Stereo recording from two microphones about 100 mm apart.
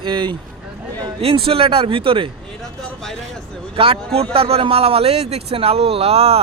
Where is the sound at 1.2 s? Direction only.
70° right (ahead or behind).